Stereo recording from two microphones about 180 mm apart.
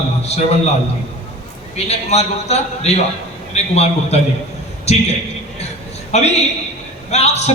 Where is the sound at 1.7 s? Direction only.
35° left (ahead or behind).